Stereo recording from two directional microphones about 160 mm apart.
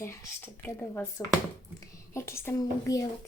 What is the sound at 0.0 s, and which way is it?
Speech, 15° left (ahead or behind).